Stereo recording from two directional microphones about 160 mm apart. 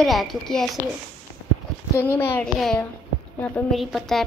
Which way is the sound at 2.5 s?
Centre (ahead or behind).